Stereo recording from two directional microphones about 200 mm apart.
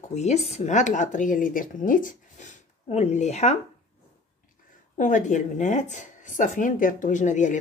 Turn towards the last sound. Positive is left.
turn(degrees=40)  # may be behind; listen again after turning